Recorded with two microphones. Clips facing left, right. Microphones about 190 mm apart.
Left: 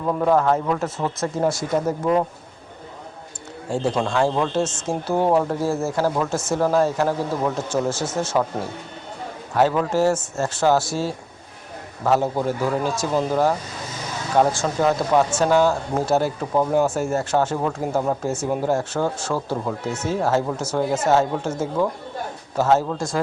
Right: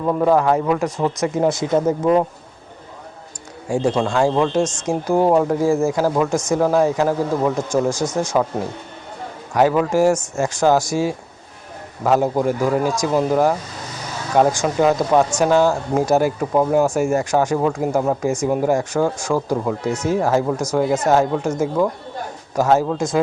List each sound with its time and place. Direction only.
0.0 s speech: 10° right (ahead or behind)
3.7 s speech: 10° right (ahead or behind)
9.6 s speech: 10° right (ahead or behind)
22.5 s speech: 10° right (ahead or behind)